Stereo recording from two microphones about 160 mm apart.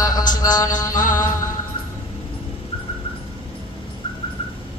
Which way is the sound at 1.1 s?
20° left (ahead or behind).